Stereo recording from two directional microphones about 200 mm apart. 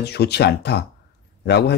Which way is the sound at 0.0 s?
55° left (ahead or behind).